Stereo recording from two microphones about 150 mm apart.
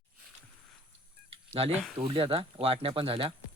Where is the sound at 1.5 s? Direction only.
40° right (ahead or behind).